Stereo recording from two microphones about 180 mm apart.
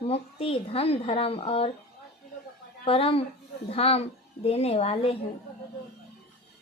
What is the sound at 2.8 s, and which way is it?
Speech, 30° left (ahead or behind).